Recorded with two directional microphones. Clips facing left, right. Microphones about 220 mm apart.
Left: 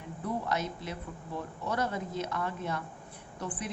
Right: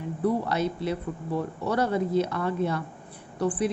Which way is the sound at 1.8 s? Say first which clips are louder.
Right 11 dB; 35° right (ahead or behind).